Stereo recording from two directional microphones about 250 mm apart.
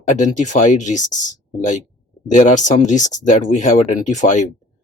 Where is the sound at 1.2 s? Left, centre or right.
Left.